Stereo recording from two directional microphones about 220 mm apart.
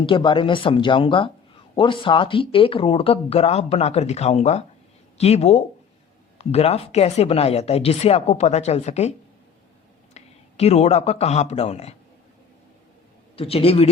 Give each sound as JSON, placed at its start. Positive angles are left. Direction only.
{"t": 0.0, "sound": "speech", "side_deg": 20}
{"t": 10.2, "sound": "speech", "side_deg": 30}
{"t": 13.3, "sound": "speech", "side_deg": 25}